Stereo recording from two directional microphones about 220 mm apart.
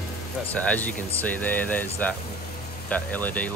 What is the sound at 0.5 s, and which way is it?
Speech, 5° left (ahead or behind).